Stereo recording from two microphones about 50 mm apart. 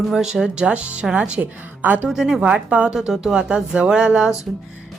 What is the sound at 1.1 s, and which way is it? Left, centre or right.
Speech, right.